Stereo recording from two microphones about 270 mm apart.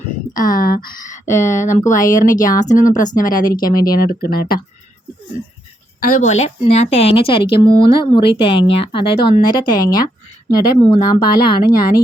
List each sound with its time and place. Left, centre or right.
0.3 s speech: left
1.2 s speech: centre
1.5 s a woman's voice: left
6.0 s a woman's voice: left